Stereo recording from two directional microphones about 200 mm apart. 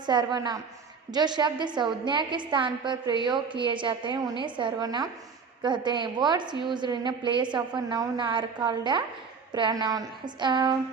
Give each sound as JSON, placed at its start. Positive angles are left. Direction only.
{"t": 0.0, "sound": "a woman's voice", "side_deg": -20}